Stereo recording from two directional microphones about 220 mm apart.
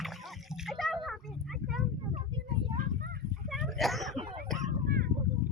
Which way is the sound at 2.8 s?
45° right (ahead or behind).